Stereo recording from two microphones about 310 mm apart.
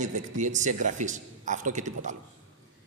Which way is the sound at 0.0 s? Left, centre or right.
Right.